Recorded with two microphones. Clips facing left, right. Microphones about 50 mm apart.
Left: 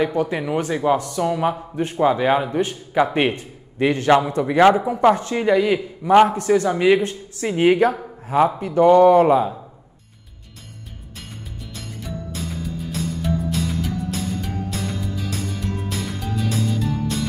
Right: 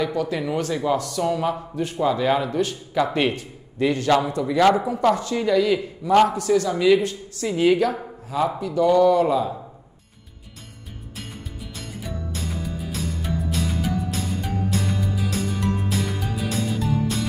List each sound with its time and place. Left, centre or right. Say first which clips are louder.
0.0 s a man's voice: left 3 dB; left
1.8 s a man's voice: left 4 dB; left
4.6 s a man's voice: left 3 dB; left
11.7 s music: left 1 dB; centre